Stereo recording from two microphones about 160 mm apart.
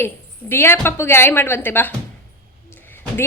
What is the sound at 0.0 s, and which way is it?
A woman's voice, 15° left (ahead or behind).